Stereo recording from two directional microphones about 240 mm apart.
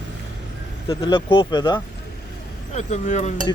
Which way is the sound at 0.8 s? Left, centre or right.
Centre.